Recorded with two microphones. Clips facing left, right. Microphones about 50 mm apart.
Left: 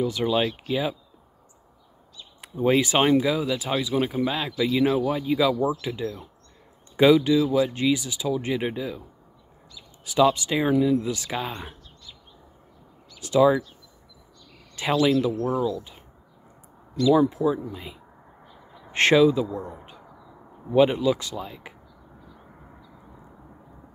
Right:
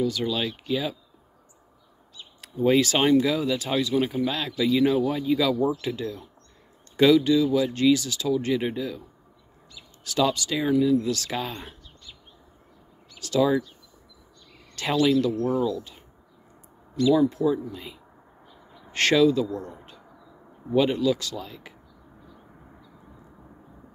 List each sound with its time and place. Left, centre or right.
0.0 s speech: left
2.4 s speech: centre
10.0 s speech: centre
13.2 s speech: centre
15.0 s speech: centre
17.3 s speech: centre
18.9 s speech: left
20.7 s speech: centre